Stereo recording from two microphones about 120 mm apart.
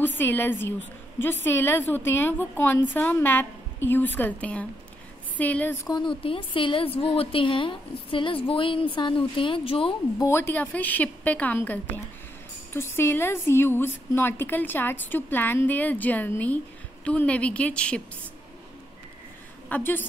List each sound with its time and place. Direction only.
0.0 s a woman's voice: 15° left (ahead or behind)
5.9 s a woman's voice: 40° left (ahead or behind)
10.1 s a woman's voice: 25° left (ahead or behind)
19.7 s a woman's voice: 15° left (ahead or behind)